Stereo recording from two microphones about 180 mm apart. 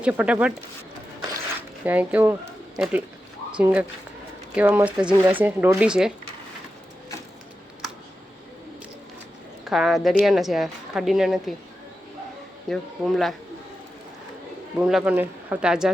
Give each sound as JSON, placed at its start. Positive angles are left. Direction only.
{"t": 0.0, "sound": "speech", "side_deg": -5}
{"t": 1.8, "sound": "speech", "side_deg": -10}
{"t": 9.6, "sound": "speech", "side_deg": 0}
{"t": 12.6, "sound": "speech", "side_deg": 0}
{"t": 14.8, "sound": "speech", "side_deg": -5}